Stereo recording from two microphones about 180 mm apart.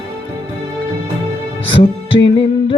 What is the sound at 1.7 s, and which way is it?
Music, 25° left (ahead or behind).